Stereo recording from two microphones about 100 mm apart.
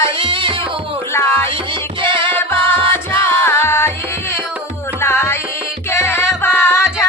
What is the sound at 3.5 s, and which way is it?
Music, 25° left (ahead or behind).